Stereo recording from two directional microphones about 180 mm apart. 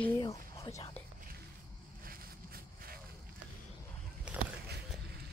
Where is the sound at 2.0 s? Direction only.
55° right (ahead or behind).